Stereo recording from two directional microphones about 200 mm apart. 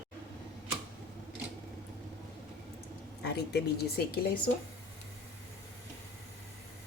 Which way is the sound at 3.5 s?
50° left (ahead or behind).